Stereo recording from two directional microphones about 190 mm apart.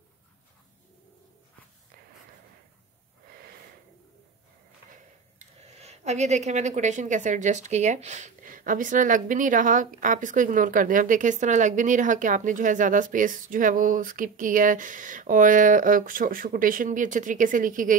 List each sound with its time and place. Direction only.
5.6 s a woman's voice: 35° right (ahead or behind)